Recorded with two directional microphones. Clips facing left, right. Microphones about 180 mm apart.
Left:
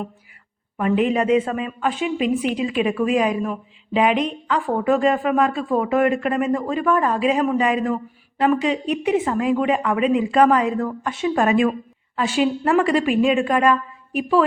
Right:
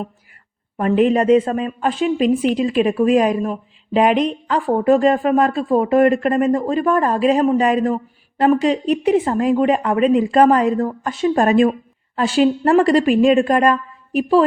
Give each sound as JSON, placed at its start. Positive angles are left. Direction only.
{"t": 0.8, "sound": "a woman's voice", "side_deg": -40}